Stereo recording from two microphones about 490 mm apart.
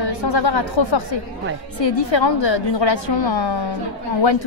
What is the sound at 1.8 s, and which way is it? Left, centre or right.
Speech, left.